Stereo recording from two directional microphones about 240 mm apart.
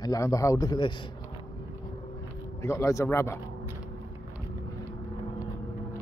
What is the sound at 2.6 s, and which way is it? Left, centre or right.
Speech, centre.